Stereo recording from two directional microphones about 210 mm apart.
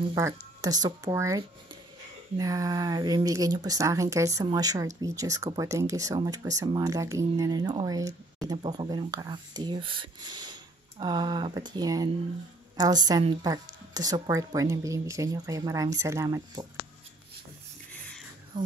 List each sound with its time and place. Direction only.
0.1 s speech: 15° right (ahead or behind)